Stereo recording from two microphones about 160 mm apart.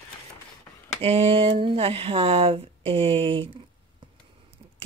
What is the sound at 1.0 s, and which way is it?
Speech, 40° right (ahead or behind).